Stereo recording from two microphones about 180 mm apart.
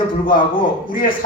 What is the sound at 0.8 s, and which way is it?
Speech, 50° left (ahead or behind).